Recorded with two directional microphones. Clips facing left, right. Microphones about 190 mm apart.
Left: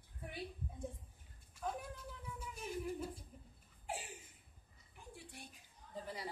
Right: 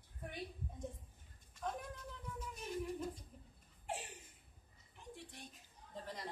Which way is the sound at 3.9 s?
5° left (ahead or behind).